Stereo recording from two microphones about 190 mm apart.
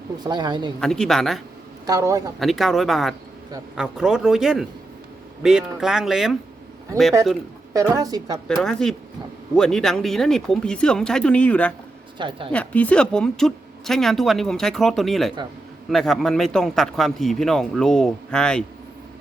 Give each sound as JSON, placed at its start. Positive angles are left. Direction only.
{"t": 0.2, "sound": "a woman's voice", "side_deg": -25}
{"t": 0.8, "sound": "speech", "side_deg": 5}
{"t": 1.9, "sound": "a man's voice", "side_deg": -15}
{"t": 2.4, "sound": "speech", "side_deg": 0}
{"t": 7.7, "sound": "a woman's voice", "side_deg": -20}
{"t": 8.4, "sound": "speech", "side_deg": 5}
{"t": 12.1, "sound": "speech", "side_deg": -25}
{"t": 12.5, "sound": "speech", "side_deg": 5}